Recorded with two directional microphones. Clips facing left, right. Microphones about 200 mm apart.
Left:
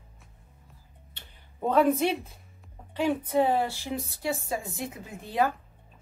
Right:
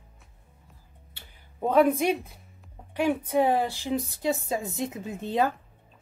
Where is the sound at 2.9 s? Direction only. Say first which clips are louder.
Right 1 dB; 15° right (ahead or behind).